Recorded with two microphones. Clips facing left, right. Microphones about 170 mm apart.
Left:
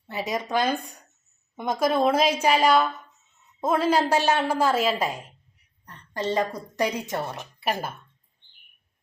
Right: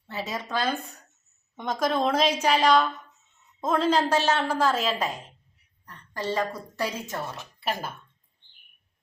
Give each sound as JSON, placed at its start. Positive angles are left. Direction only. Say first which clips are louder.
{"t": 0.1, "sound": "a woman's voice", "louder": "left 4 dB", "side_deg": 15}
{"t": 5.8, "sound": "a sound", "louder": "left 3 dB", "side_deg": 20}
{"t": 6.7, "sound": "a woman's voice", "louder": "left 5 dB", "side_deg": 20}